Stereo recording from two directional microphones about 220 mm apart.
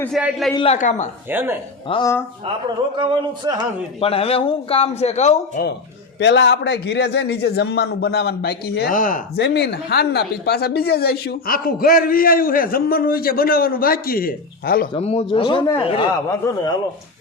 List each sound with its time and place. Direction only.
0.0 s a man's voice: 5° right (ahead or behind)
0.5 s a man's voice: 25° left (ahead or behind)
1.3 s speech: 10° right (ahead or behind)
1.9 s speech: 15° left (ahead or behind)
3.0 s a sound: 20° right (ahead or behind)
4.0 s a man's voice: 25° left (ahead or behind)
6.1 s a man's voice: 55° left (ahead or behind)
14.9 s a man's voice: 25° left (ahead or behind)